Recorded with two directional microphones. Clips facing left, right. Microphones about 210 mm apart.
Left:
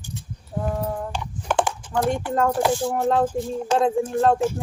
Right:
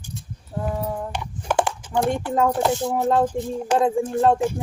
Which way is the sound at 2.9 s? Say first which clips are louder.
Right 1 dB; 5° right (ahead or behind).